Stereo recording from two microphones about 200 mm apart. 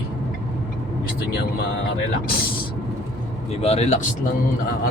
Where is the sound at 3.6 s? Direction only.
30° left (ahead or behind).